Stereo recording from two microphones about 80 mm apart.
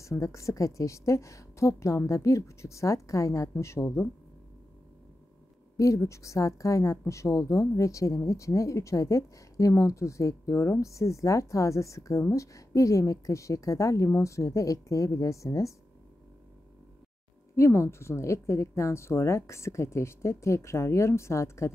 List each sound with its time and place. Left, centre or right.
0.0 s a woman's voice: left
5.8 s a woman's voice: left
17.6 s a woman's voice: left